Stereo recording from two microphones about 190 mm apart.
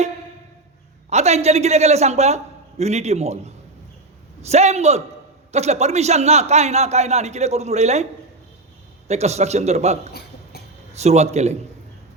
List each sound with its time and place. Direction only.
1.1 s speech: 35° right (ahead or behind)
9.0 s speech: 35° right (ahead or behind)
10.1 s a sound: 55° left (ahead or behind)
10.9 s speech: 35° right (ahead or behind)